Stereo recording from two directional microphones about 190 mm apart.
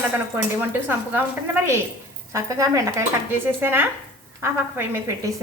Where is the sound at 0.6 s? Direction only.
10° right (ahead or behind).